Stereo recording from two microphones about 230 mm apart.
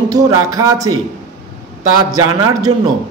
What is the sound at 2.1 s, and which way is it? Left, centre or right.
Speech, centre.